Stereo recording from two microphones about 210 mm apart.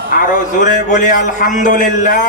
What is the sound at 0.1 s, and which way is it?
A man's voice, 40° left (ahead or behind).